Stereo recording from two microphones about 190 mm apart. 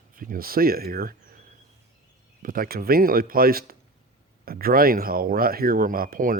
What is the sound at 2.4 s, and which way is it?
Speech, 50° right (ahead or behind).